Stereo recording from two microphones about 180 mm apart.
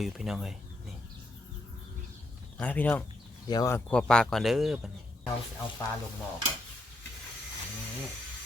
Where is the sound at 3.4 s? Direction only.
20° left (ahead or behind).